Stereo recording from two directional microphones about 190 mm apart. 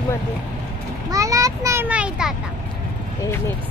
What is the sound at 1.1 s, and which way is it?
A child's voice, 15° right (ahead or behind).